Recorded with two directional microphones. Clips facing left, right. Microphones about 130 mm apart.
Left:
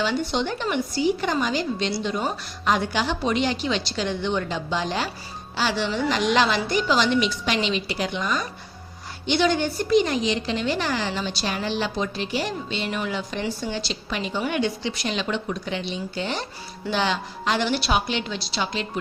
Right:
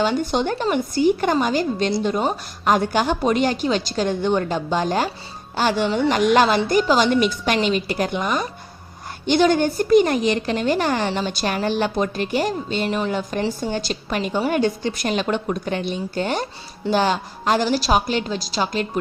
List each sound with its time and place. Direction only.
0.0 s a woman's voice: 45° right (ahead or behind)